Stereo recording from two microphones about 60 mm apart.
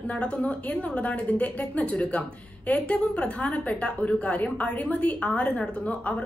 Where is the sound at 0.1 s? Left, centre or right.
Centre.